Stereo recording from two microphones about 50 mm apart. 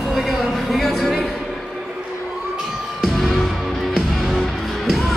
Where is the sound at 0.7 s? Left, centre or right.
Centre.